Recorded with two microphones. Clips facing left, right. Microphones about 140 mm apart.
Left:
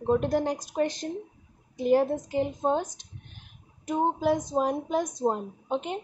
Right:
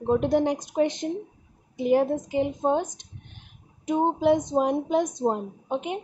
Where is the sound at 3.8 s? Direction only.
20° right (ahead or behind).